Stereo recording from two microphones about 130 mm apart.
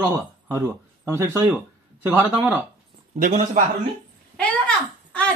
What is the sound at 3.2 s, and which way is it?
Speech, 80° right.